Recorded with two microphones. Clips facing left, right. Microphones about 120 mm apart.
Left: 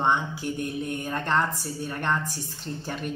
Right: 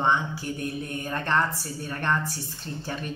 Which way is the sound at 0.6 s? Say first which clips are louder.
Left 1 dB; 15° left (ahead or behind).